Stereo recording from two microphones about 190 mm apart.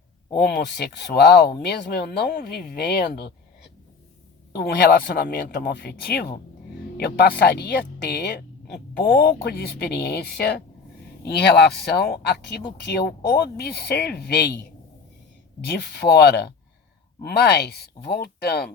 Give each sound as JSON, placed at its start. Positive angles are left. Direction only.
{"t": 0.3, "sound": "a woman's voice", "side_deg": 55}
{"t": 15.6, "sound": "a woman's voice", "side_deg": 60}